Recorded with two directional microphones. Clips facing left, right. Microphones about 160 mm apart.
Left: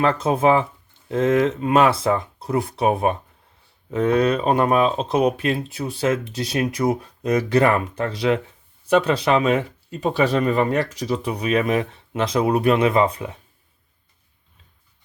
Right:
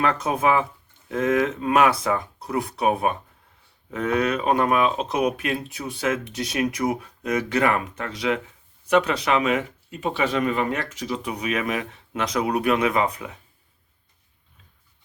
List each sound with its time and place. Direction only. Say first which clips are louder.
0.0 s speech: left 4 dB; 30° left (ahead or behind)